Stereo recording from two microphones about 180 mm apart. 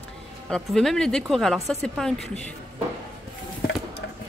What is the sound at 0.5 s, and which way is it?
Speech, centre (ahead or behind).